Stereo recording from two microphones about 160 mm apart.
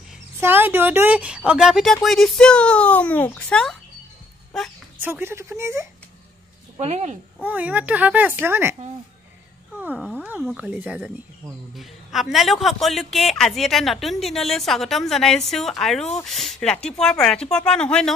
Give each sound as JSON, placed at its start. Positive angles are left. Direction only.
{"t": 0.4, "sound": "a man's voice", "side_deg": -15}
{"t": 5.0, "sound": "a child's voice", "side_deg": -15}
{"t": 6.8, "sound": "speech", "side_deg": -45}
{"t": 7.4, "sound": "a child's voice", "side_deg": -10}
{"t": 9.8, "sound": "a child's voice", "side_deg": -5}